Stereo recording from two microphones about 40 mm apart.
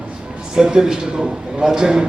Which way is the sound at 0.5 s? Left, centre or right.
Centre.